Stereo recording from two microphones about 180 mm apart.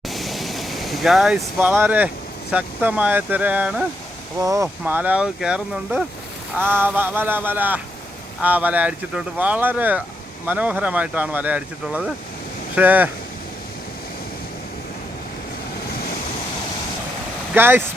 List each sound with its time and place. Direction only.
0.1 s vehicle: centre (ahead or behind)
1.5 s speech: 10° right (ahead or behind)
4.4 s speech: 20° right (ahead or behind)
17.5 s speech: 10° right (ahead or behind)